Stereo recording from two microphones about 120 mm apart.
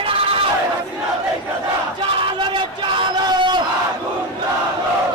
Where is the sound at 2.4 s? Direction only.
45° right (ahead or behind).